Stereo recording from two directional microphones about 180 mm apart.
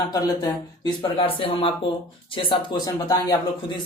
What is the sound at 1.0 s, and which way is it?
Speech, 30° left (ahead or behind).